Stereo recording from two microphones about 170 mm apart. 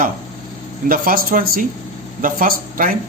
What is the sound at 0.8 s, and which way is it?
A man's voice, 60° right (ahead or behind).